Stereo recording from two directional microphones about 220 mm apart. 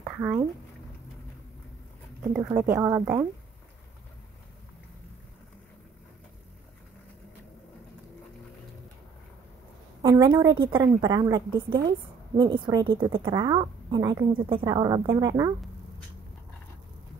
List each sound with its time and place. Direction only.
0.0 s a sound: 5° right (ahead or behind)
2.3 s a woman's voice: 10° right (ahead or behind)
10.0 s a woman's voice: 20° right (ahead or behind)